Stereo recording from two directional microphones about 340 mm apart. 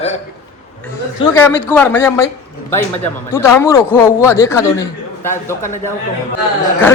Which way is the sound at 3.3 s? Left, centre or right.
Centre.